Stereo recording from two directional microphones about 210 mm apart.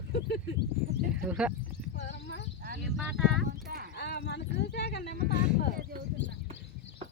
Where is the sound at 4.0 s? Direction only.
50° left (ahead or behind).